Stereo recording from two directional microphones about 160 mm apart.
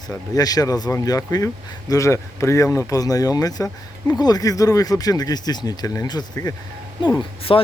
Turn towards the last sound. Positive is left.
turn(degrees=30)  # may be behind; listen again after turning